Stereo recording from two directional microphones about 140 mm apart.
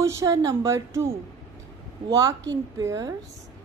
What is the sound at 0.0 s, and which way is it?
Speech, 20° right (ahead or behind).